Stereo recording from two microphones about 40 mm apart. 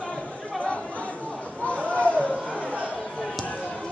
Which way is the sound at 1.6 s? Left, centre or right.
Left.